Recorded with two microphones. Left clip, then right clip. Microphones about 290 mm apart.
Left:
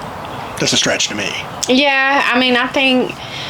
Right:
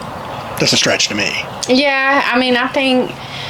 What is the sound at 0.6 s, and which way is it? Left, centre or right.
Speech, right.